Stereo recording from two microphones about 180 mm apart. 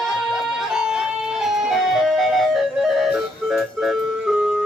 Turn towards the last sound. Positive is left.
turn(degrees=0)  # may be behind; listen again after turning